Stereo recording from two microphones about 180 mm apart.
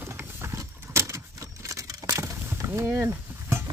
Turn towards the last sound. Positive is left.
turn(degrees=-10)  # may be behind; listen again after turning